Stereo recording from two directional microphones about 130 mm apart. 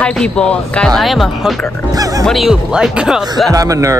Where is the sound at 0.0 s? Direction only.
5° left (ahead or behind).